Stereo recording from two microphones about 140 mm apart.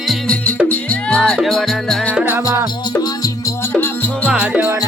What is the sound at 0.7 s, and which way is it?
Music, 10° left (ahead or behind).